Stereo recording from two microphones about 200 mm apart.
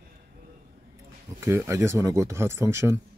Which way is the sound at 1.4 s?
15° right (ahead or behind).